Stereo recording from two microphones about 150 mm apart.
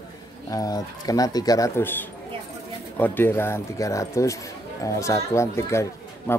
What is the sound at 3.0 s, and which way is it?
Speech, 15° left (ahead or behind).